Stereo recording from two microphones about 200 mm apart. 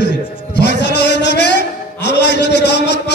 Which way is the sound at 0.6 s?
60° left (ahead or behind).